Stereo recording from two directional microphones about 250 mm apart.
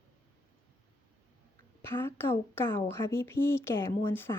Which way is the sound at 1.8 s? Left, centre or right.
Centre.